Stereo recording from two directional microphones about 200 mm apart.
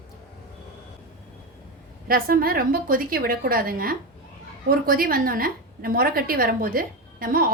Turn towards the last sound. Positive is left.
turn(degrees=-45)  # may be behind; listen again after turning